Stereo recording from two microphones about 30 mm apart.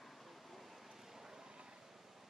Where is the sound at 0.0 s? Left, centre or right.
Centre.